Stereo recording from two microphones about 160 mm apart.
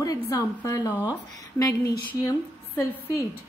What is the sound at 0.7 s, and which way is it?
A woman's voice, 20° left (ahead or behind).